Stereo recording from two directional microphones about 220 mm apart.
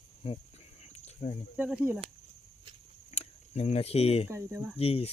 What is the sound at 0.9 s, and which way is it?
Cricket, 30° left (ahead or behind).